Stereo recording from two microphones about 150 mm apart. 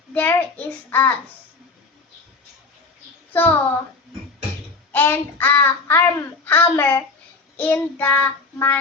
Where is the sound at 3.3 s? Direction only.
15° left (ahead or behind).